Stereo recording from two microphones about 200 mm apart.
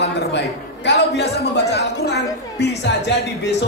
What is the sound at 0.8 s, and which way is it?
Speech, 55° left (ahead or behind).